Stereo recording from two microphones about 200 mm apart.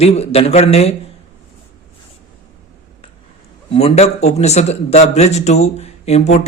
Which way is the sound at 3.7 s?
30° left (ahead or behind).